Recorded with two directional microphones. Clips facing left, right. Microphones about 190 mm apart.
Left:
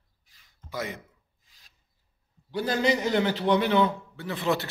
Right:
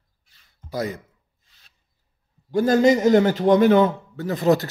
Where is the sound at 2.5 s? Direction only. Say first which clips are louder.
Right 9 dB; 45° right (ahead or behind).